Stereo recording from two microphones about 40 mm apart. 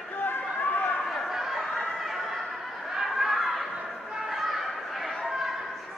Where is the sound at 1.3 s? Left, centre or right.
Centre.